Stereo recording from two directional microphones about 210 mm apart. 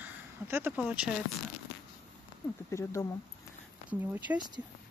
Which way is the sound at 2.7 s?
15° left (ahead or behind).